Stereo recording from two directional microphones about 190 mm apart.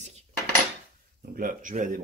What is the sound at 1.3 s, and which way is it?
Speech, 45° right (ahead or behind).